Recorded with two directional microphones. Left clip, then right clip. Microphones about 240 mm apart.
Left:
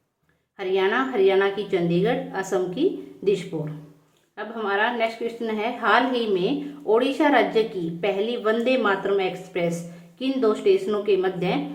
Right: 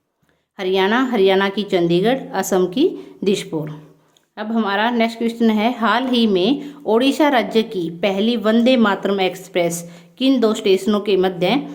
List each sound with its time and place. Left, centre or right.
0.5 s a woman's voice: right